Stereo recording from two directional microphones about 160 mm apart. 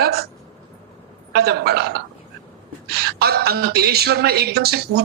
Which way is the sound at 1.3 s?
90° right.